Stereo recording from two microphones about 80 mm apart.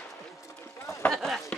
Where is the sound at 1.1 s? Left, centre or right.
Centre.